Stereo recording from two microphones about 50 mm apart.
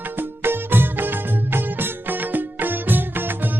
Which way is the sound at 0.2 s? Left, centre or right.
Right.